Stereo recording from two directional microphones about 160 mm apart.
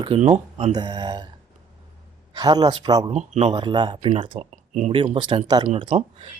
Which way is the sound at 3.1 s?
45° right (ahead or behind).